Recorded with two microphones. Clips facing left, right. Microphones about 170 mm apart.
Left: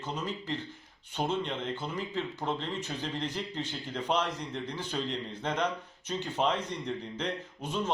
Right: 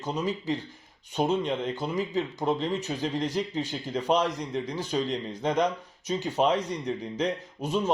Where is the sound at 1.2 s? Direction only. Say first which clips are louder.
Right 4 dB; 10° right (ahead or behind).